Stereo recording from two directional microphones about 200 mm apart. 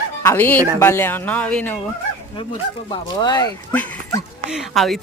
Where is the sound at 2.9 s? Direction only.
20° left (ahead or behind).